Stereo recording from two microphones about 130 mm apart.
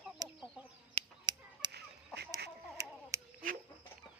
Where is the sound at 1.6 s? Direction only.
35° right (ahead or behind).